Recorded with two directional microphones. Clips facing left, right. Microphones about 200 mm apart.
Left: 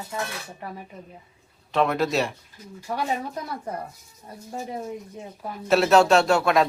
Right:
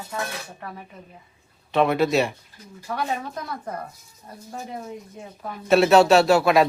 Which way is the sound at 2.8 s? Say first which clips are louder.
Even; 10° left (ahead or behind).